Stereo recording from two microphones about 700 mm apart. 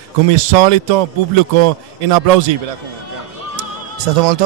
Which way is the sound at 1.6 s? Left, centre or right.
Right.